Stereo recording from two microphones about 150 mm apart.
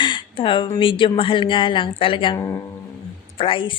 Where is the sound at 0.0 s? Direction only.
35° left (ahead or behind).